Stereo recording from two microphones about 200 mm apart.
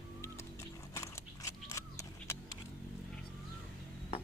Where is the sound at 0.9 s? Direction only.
15° left (ahead or behind).